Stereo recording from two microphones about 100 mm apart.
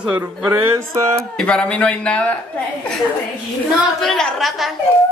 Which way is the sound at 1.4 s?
10° left (ahead or behind).